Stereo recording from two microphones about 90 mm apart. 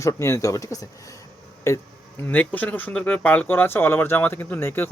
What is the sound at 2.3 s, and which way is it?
Speech, 15° left (ahead or behind).